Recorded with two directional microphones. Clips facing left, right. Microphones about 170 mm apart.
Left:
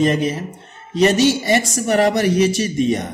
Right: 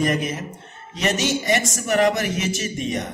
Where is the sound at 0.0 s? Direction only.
30° left (ahead or behind).